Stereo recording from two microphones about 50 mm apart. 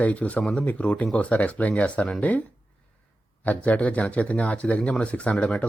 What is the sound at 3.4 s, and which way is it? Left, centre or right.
Speech, left.